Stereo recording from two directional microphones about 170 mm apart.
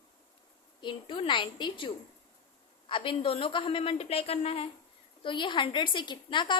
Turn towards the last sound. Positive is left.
turn(degrees=25)  # may be behind; listen again after turning